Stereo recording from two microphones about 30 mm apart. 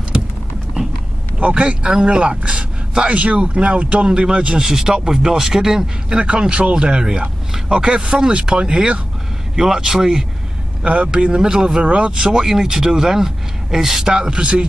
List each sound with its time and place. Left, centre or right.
1.4 s a man's voice: right
3.1 s speech: right
4.1 s speech: right; by 6.1 s centre
6.1 s speech: right
7.9 s speech: right
11.4 s speech: right
11.8 s speech: right; by 14.1 s centre
14.1 s speech: right